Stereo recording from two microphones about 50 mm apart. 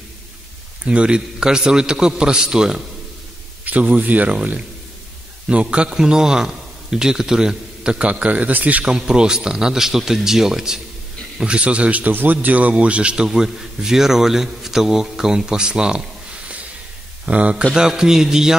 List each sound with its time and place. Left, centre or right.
0.8 s a man's voice: right
3.6 s a man's voice: right
8.8 s a man's voice: centre
11.4 s a man's voice: right
12.1 s a man's voice: right; by 16.0 s centre
17.3 s a man's voice: right
17.7 s a man's voice: centre